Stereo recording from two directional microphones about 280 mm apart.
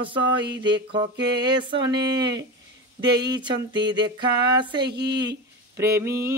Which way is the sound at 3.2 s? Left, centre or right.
Centre.